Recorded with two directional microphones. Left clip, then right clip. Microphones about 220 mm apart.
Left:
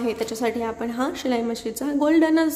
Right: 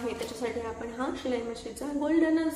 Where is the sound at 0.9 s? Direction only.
50° left (ahead or behind).